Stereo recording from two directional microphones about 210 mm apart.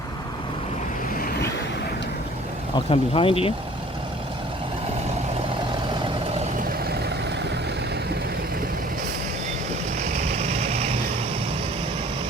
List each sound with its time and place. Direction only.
2.7 s speech: 25° left (ahead or behind)
10.5 s vehicle: 30° right (ahead or behind)